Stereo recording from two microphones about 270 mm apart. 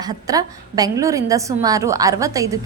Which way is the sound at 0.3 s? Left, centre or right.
Centre.